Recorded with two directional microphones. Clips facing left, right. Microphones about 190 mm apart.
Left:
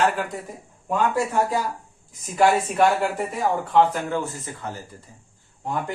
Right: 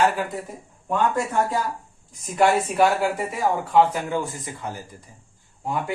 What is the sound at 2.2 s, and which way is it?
Speech, centre (ahead or behind).